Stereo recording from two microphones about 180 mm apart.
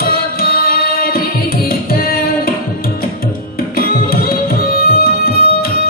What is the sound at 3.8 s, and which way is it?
Tabla, 55° left (ahead or behind).